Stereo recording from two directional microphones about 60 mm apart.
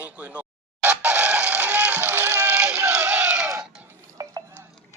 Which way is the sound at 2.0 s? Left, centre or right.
Right.